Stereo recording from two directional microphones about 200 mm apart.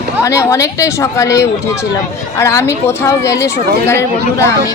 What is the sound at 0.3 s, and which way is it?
Speech, 15° left (ahead or behind).